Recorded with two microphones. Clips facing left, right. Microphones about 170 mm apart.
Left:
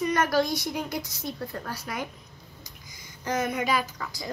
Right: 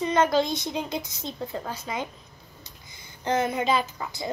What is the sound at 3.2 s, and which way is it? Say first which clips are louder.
A child's voice: right 3 dB; 25° right (ahead or behind).